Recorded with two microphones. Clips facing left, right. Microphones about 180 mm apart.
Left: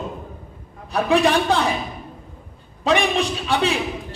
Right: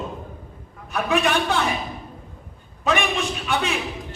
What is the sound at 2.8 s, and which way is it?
Speech, 35° left (ahead or behind).